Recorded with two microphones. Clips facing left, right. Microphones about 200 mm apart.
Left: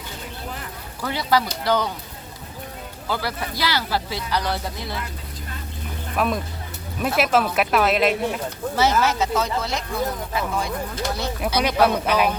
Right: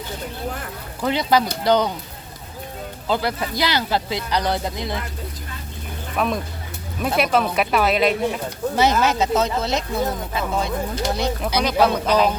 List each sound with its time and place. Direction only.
1.0 s speech: 20° right (ahead or behind)
3.1 s speech: 20° right (ahead or behind)
6.1 s speech: centre (ahead or behind)
8.7 s speech: 20° right (ahead or behind)
11.6 s speech: 10° left (ahead or behind)